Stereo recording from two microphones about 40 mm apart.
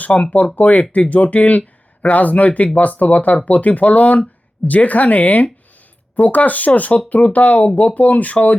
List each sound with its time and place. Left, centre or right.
0.0 s speech: left